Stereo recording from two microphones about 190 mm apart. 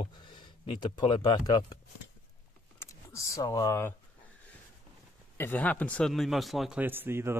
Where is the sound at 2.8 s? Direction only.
15° left (ahead or behind).